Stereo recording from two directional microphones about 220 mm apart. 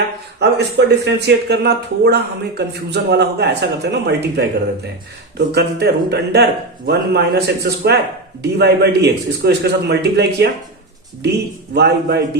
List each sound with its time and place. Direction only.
0.3 s speech: 50° right (ahead or behind)
5.5 s speech: 50° right (ahead or behind)